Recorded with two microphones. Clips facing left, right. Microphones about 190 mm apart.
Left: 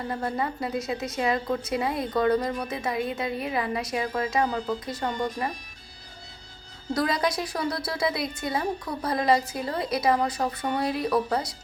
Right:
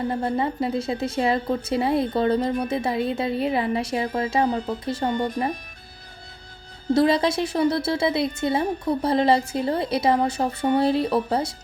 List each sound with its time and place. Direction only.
0.1 s a woman's voice: 25° right (ahead or behind)
6.9 s a woman's voice: 25° right (ahead or behind)